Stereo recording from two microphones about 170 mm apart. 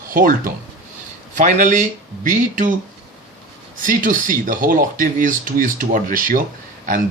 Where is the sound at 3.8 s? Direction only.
50° right (ahead or behind).